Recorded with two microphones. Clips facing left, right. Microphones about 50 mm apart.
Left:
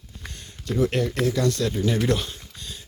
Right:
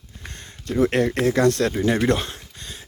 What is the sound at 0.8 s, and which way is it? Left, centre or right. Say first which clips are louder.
Speech: right 4 dB; right.